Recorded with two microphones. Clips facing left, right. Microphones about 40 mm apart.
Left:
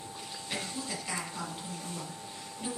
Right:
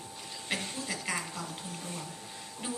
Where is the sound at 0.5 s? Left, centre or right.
Right.